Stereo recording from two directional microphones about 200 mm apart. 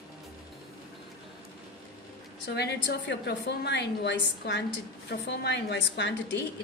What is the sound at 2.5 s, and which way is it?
A woman's voice, 55° left (ahead or behind).